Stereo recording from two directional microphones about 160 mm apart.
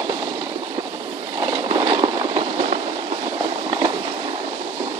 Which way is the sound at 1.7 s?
30° right (ahead or behind).